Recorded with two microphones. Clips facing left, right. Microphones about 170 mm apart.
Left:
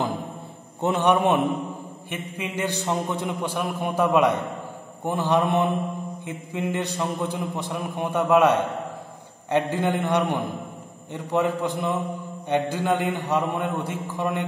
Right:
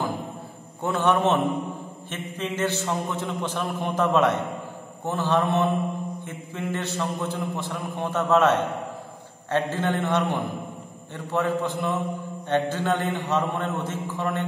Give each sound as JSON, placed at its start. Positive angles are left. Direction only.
{"t": 0.7, "sound": "a man's voice", "side_deg": 20}